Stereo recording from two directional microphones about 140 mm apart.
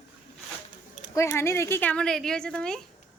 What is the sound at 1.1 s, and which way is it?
Speech, 20° left (ahead or behind).